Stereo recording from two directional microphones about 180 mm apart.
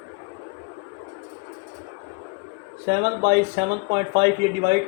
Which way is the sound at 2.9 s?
55° right (ahead or behind).